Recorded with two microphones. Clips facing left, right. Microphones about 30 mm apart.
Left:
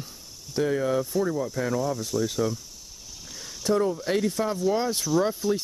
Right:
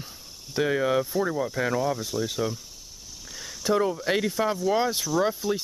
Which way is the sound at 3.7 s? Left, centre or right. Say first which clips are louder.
Even; right.